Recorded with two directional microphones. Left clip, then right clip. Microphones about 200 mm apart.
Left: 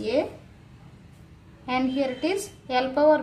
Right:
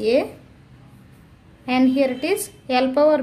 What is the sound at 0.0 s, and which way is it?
Speech, 45° right (ahead or behind).